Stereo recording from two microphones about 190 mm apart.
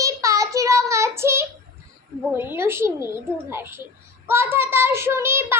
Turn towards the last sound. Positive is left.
turn(degrees=-15)  # may be behind; listen again after turning